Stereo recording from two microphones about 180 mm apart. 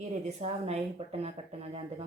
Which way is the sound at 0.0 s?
40° right (ahead or behind).